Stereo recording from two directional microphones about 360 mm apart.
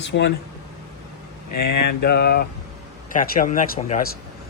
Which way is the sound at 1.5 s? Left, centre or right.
Left.